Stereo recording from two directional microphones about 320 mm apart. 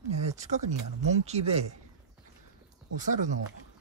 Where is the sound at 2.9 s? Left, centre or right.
Right.